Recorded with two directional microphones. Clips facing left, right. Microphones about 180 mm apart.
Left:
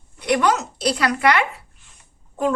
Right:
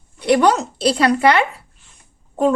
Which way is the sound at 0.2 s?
30° right (ahead or behind).